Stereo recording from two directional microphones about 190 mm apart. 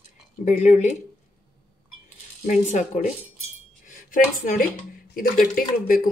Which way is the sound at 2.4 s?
40° left (ahead or behind).